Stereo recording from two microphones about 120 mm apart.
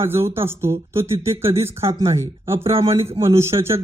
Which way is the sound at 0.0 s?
25° right (ahead or behind).